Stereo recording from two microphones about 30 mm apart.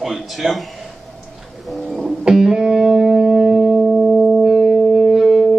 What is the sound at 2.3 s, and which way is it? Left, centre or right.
Music, centre.